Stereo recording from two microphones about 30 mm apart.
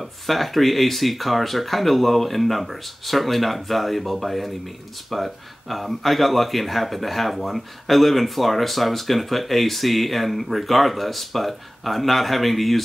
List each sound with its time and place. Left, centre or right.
0.0 s speech: centre